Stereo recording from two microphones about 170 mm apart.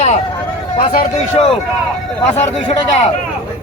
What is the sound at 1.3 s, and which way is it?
Speech, 35° left (ahead or behind).